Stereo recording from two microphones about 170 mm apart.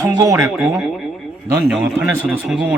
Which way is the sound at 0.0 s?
20° right (ahead or behind).